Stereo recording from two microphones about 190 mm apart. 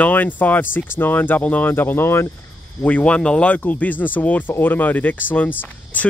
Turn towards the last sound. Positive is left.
turn(degrees=10)  # may be behind; listen again after turning